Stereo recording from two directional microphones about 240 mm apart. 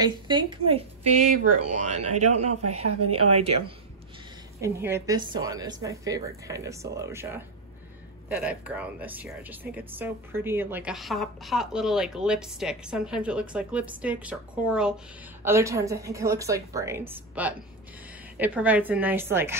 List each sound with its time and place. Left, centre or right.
0.0 s a woman's voice: centre
2.6 s speech: right
3.3 s a woman's voice: right
4.6 s a woman's voice: centre